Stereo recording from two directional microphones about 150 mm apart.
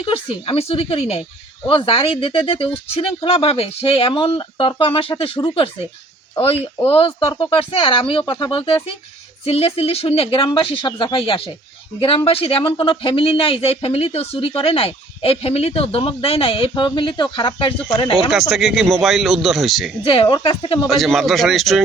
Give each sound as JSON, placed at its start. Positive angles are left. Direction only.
{"t": 0.0, "sound": "speech", "side_deg": 35}
{"t": 18.3, "sound": "speech", "side_deg": 0}
{"t": 20.1, "sound": "speech", "side_deg": 35}
{"t": 20.8, "sound": "speech", "side_deg": 0}